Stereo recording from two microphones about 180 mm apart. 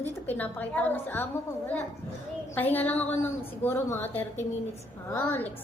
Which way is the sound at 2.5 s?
10° left (ahead or behind).